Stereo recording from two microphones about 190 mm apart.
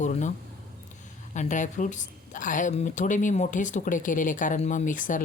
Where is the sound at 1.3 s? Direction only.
40° left (ahead or behind).